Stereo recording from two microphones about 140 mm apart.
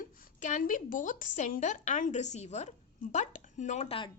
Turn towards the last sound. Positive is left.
turn(degrees=40)  # may be behind; listen again after turning